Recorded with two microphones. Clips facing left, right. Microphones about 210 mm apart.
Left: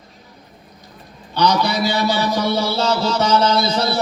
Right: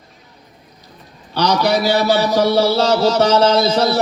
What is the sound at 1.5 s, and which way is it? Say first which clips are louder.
Music: right 3 dB; 60° right (ahead or behind).